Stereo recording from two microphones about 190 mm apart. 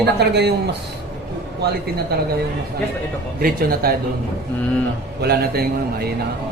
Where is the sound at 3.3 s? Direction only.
50° right (ahead or behind).